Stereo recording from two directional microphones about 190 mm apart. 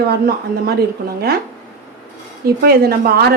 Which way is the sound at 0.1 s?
55° right (ahead or behind).